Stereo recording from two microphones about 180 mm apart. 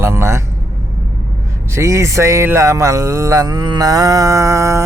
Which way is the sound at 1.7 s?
15° right (ahead or behind).